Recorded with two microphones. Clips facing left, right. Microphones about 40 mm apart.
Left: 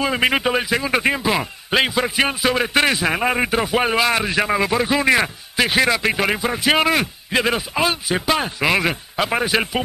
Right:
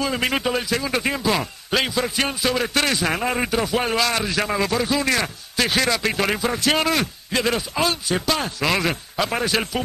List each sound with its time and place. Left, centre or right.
0.0 s speech: left